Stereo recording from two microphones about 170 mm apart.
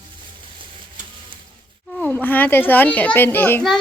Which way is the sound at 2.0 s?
10° left (ahead or behind).